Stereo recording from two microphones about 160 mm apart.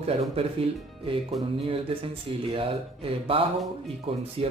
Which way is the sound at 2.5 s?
35° right (ahead or behind).